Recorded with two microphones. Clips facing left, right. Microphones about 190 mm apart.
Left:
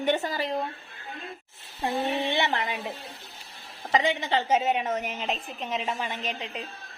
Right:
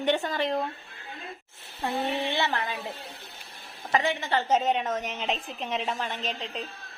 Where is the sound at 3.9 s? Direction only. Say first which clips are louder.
Left 1 dB; 20° left (ahead or behind).